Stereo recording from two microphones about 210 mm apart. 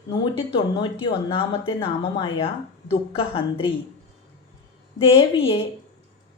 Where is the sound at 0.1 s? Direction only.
25° left (ahead or behind).